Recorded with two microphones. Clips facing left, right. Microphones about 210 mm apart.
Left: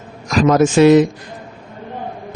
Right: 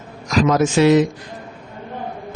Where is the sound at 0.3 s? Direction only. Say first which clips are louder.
Left 3 dB; 50° left (ahead or behind).